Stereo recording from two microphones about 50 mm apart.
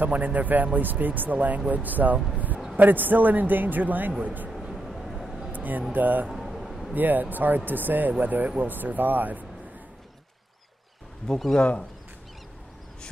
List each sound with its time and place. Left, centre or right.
0.0 s speech: right
2.3 s a sound: right
2.7 s speech: right
4.5 s a sound: centre
5.5 s speech: right
6.3 s a sound: centre
6.9 s speech: right
11.2 s speech: centre
11.5 s speech: centre